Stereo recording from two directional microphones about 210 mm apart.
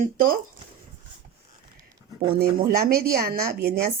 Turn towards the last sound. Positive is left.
turn(degrees=-45)  # may be behind; listen again after turning